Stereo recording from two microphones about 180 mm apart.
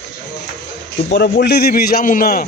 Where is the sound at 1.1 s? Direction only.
70° left (ahead or behind); by 2.4 s 55° left (ahead or behind).